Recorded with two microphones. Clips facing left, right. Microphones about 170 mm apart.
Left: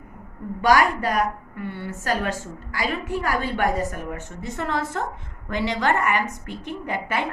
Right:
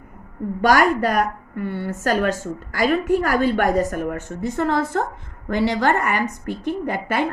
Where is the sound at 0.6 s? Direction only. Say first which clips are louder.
Right 2 dB; 45° right (ahead or behind).